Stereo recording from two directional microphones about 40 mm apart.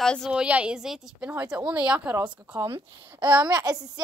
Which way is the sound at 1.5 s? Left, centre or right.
Right.